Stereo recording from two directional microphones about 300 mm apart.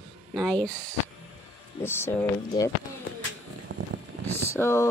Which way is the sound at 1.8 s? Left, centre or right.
Centre.